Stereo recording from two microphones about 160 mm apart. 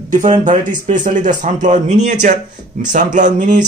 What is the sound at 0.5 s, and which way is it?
Speech, 50° right (ahead or behind).